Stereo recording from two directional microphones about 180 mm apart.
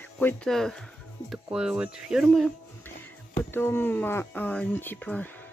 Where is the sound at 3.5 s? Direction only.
10° left (ahead or behind).